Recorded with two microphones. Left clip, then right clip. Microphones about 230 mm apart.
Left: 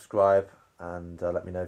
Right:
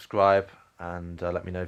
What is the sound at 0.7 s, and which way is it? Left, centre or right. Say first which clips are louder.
Speech: right 1 dB; right.